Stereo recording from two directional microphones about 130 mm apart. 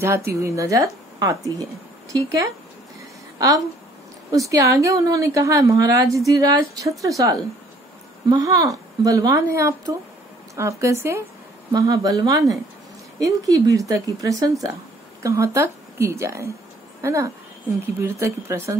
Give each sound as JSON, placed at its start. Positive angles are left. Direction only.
{"t": 0.0, "sound": "a woman's voice", "side_deg": -20}